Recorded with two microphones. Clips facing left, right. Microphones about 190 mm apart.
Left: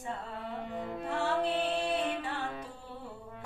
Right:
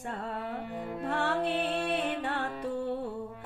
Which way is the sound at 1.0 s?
60° right (ahead or behind).